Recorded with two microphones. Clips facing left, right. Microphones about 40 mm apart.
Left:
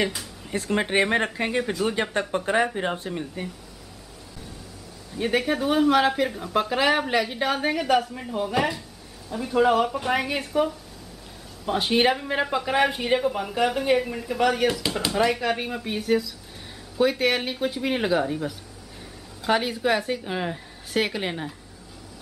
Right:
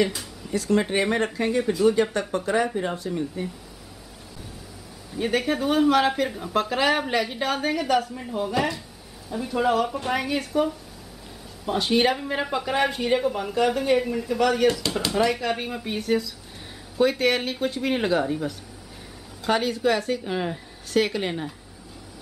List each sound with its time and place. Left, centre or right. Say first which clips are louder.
0.5 s speech: right 2 dB; left
1.6 s speech: right 5 dB; centre
2.1 s speech: left 1 dB; left
5.1 s speech: even; centre